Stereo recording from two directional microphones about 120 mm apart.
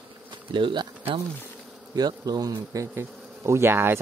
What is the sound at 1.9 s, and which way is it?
Speech, 35° right (ahead or behind).